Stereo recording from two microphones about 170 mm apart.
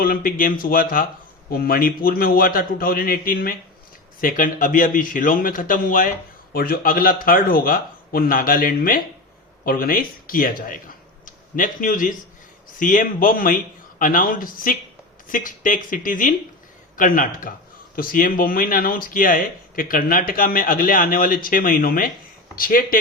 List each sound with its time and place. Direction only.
0.0 s a man's voice: 55° left (ahead or behind)